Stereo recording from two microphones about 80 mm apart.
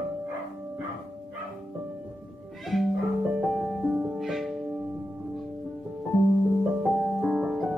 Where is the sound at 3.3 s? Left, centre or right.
Centre.